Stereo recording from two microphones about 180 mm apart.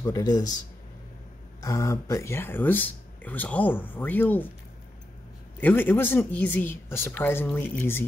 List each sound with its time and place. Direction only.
0.0 s a man's voice: 20° left (ahead or behind)
1.6 s speech: 20° left (ahead or behind)
5.6 s speech: 10° left (ahead or behind)